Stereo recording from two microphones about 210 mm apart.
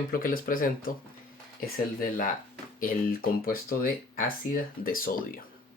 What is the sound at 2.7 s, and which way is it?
Speech, 40° left (ahead or behind).